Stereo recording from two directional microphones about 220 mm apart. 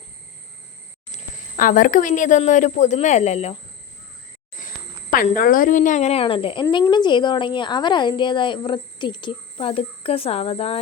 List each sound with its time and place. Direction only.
1.1 s speech: 35° left (ahead or behind)
5.4 s speech: 40° left (ahead or behind)